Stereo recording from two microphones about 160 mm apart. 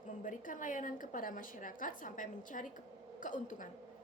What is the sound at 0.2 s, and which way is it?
A woman's voice, 55° left (ahead or behind).